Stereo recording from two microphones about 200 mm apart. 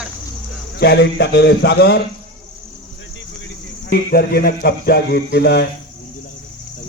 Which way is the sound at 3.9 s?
50° left (ahead or behind).